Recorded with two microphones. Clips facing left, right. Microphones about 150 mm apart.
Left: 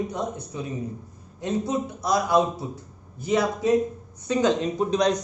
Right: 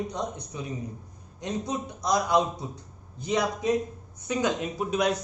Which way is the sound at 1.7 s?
15° right (ahead or behind).